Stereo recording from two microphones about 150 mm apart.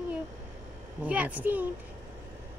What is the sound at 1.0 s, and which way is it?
Speech, 10° right (ahead or behind).